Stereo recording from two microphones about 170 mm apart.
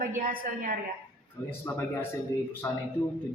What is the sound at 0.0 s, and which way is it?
Speech, 55° right (ahead or behind).